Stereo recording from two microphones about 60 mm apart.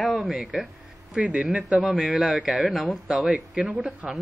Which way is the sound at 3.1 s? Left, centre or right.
Centre.